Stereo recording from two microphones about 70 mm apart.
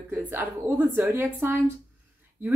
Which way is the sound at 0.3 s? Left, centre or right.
Right.